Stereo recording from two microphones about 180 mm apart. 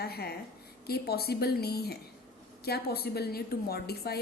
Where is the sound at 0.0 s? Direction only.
60° left (ahead or behind).